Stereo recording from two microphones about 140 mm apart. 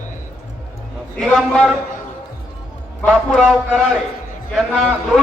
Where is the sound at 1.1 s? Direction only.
5° left (ahead or behind).